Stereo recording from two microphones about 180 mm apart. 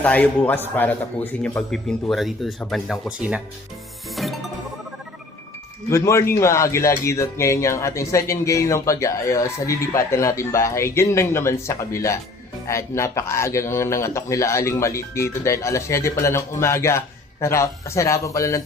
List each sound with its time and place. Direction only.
0.0 s speech: 10° left (ahead or behind); by 3.4 s 5° right (ahead or behind)
4.1 s music: centre (ahead or behind)
5.9 s speech: 15° left (ahead or behind)